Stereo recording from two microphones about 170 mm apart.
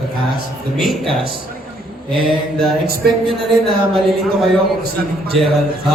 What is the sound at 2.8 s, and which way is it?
Speech, 65° right (ahead or behind).